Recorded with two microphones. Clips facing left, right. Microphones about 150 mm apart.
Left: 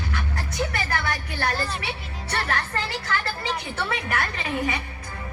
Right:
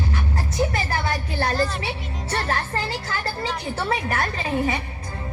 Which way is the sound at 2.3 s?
25° right (ahead or behind).